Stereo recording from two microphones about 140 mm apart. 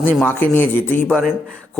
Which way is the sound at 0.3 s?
15° left (ahead or behind).